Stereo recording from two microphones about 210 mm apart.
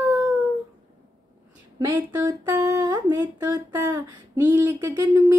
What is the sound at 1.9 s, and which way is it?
Humming, 10° right (ahead or behind).